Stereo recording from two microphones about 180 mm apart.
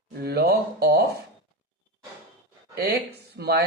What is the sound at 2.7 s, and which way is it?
Speech, 60° right (ahead or behind).